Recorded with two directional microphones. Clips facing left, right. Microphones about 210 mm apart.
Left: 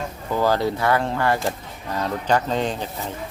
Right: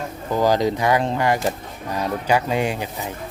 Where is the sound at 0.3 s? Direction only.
15° right (ahead or behind).